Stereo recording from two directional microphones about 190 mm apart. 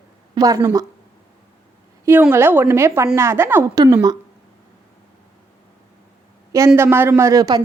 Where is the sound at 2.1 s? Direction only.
10° right (ahead or behind).